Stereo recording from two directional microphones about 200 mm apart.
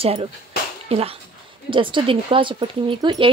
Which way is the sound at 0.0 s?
30° right (ahead or behind).